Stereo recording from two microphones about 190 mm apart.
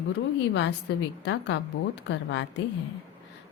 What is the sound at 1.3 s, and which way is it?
A woman's voice, 65° left (ahead or behind).